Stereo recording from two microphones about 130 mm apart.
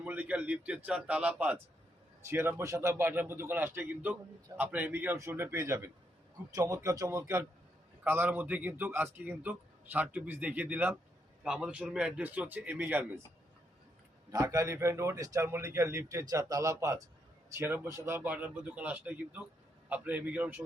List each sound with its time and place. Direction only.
0.0 s a man's voice: 10° right (ahead or behind)
14.3 s a man's voice: 25° right (ahead or behind)